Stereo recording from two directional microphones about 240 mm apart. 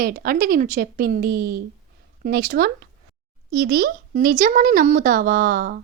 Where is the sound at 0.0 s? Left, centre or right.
Right.